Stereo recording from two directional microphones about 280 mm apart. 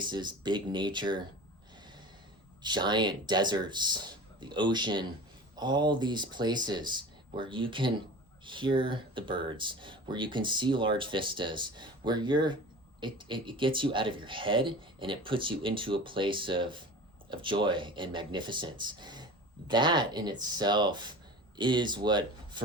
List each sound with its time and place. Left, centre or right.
0.0 s speech: centre
2.6 s speech: centre